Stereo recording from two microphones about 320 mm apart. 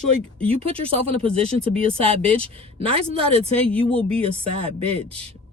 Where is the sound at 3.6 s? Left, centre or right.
Centre.